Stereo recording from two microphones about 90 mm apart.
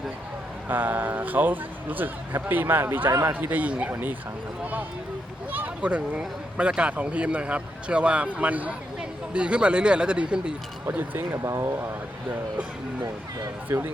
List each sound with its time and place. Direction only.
0.7 s a man's voice: 20° right (ahead or behind)
3.1 s a man's voice: 35° right (ahead or behind)
3.3 s a man's voice: 20° right (ahead or behind)
10.8 s a man's voice: 25° right (ahead or behind)
13.7 s a man's voice: 25° right (ahead or behind)